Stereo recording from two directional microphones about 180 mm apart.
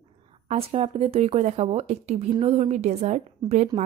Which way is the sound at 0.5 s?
35° right (ahead or behind).